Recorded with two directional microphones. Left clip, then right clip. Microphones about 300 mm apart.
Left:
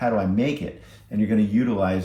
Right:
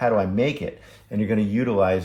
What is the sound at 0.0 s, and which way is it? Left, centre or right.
Speech, right.